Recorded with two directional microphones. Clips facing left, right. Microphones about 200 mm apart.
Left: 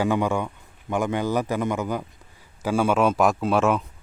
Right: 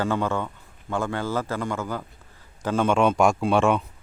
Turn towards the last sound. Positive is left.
turn(degrees=0)  # may be behind; listen again after turning